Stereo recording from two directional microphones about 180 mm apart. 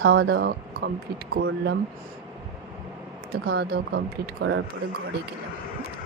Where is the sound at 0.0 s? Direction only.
60° right (ahead or behind).